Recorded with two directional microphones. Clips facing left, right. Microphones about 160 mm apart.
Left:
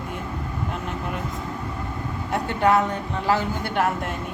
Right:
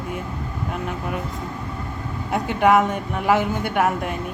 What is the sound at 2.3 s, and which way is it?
Speech, 10° right (ahead or behind).